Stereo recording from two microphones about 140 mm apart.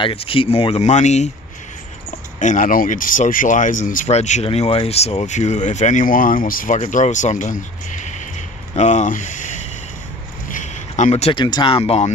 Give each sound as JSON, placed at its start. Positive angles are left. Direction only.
{"t": 0.0, "sound": "speech", "side_deg": 40}
{"t": 2.3, "sound": "speech", "side_deg": 60}
{"t": 8.7, "sound": "speech", "side_deg": 55}
{"t": 10.5, "sound": "a sound", "side_deg": 60}
{"t": 11.3, "sound": "speech", "side_deg": 35}